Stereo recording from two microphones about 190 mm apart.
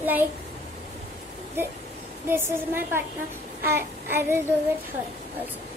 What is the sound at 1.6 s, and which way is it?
A woman's voice, 10° right (ahead or behind).